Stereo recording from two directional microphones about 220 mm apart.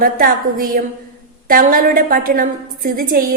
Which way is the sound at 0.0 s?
40° right (ahead or behind).